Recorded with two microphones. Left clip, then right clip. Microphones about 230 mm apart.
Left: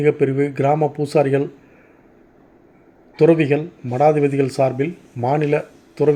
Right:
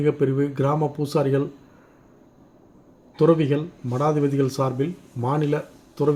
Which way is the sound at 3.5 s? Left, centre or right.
Right.